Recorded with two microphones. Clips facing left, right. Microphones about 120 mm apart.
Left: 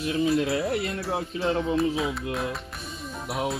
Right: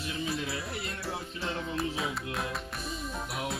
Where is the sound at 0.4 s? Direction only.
65° left (ahead or behind).